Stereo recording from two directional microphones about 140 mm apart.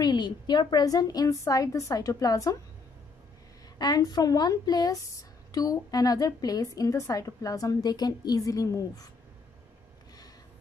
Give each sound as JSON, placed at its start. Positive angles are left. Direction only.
{"t": 0.0, "sound": "a woman's voice", "side_deg": 30}
{"t": 3.7, "sound": "a woman's voice", "side_deg": 30}